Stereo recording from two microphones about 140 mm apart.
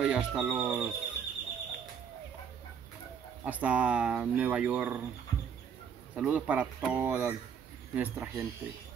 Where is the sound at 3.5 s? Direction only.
10° right (ahead or behind).